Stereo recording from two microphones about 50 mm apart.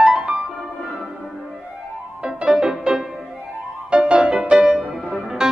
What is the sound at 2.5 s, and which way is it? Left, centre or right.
Music, centre.